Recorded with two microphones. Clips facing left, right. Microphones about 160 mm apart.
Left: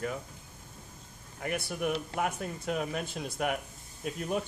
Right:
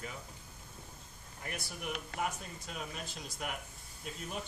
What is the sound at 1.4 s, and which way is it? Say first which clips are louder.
Speech: left 10 dB; 60° left (ahead or behind).